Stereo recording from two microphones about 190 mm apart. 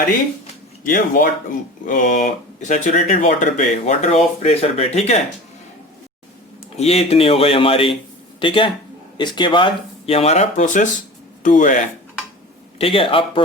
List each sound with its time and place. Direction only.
0.9 s speech: 45° left (ahead or behind)
6.7 s a man's voice: 35° left (ahead or behind)
12.8 s a man's voice: 30° left (ahead or behind)